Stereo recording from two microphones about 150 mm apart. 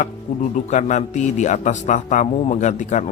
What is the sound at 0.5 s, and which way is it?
A man's voice, 55° left (ahead or behind).